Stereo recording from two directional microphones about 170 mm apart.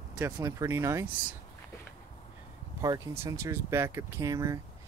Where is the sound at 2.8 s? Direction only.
20° right (ahead or behind).